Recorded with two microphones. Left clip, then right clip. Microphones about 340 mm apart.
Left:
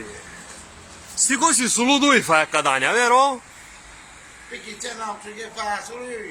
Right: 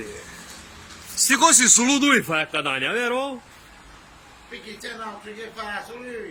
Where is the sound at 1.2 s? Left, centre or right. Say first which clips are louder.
Right 3 dB; centre.